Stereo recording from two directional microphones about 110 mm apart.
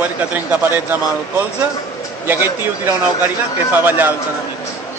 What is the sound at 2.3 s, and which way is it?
A man's voice, 20° right (ahead or behind).